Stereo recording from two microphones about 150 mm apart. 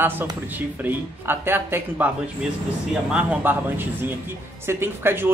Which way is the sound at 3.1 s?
10° right (ahead or behind).